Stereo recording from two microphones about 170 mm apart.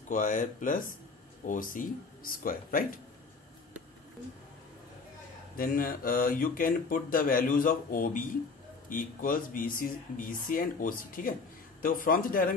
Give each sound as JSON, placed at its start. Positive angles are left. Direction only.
{"t": 0.1, "sound": "speech", "side_deg": 50}
{"t": 5.6, "sound": "speech", "side_deg": 55}